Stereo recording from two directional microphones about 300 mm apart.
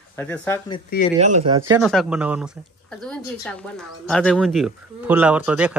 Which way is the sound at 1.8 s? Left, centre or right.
Centre.